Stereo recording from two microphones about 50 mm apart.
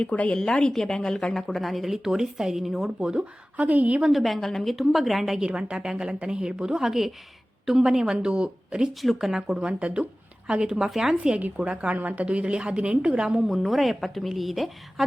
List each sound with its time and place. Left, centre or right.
0.0 s speech: left
0.3 s speech: centre
3.0 s speech: centre
3.6 s a woman's voice: right
4.1 s speech: centre
5.5 s speech: centre
8.9 s speech: centre
9.1 s speech: centre
11.2 s a woman's voice: right
13.5 s speech: centre